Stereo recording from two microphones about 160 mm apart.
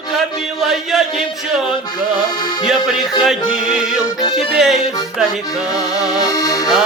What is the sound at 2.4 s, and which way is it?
Music, 25° left (ahead or behind).